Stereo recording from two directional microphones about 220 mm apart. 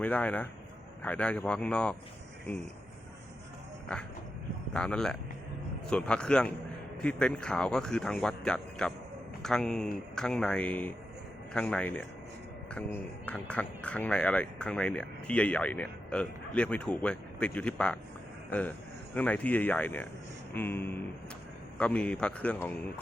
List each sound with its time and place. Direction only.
0.0 s speech: 5° left (ahead or behind)
4.7 s speech: 5° left (ahead or behind)
19.1 s speech: 5° left (ahead or behind)